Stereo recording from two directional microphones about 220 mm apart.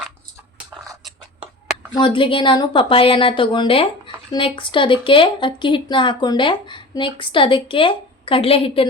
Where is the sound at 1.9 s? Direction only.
20° left (ahead or behind).